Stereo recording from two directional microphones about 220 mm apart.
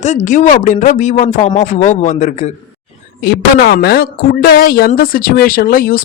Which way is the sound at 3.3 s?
45° left (ahead or behind).